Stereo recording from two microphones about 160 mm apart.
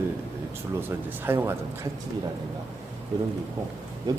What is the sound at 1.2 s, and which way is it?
Speech, 15° right (ahead or behind).